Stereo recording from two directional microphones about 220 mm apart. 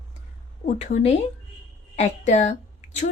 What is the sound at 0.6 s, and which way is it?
A woman's voice, 30° left (ahead or behind).